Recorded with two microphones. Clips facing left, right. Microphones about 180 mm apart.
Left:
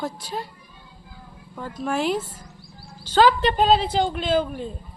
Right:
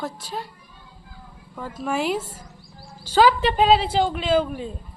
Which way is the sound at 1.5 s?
5° right (ahead or behind).